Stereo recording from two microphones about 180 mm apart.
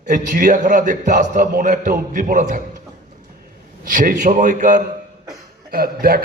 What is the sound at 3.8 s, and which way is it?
Speech, 50° right (ahead or behind).